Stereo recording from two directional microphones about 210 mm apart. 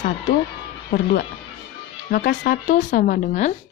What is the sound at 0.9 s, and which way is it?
A woman's voice, 40° left (ahead or behind).